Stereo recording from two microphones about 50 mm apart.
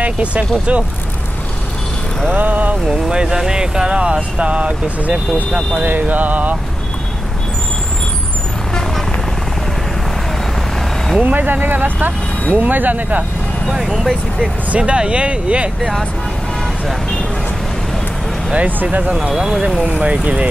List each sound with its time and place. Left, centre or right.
0.0 s speech: right
2.3 s speech: right
2.9 s speech: centre
5.8 s speech: right
11.1 s speech: right
13.7 s speech: centre
14.7 s speech: right
15.8 s speech: centre
18.7 s speech: right
19.3 s speech: centre
20.0 s speech: right